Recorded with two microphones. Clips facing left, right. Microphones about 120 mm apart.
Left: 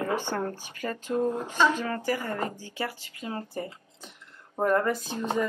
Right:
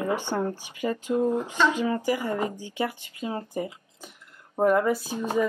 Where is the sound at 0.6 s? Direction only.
10° right (ahead or behind).